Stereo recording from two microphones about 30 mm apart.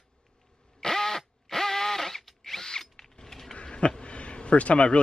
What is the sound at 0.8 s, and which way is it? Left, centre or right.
Drill, centre.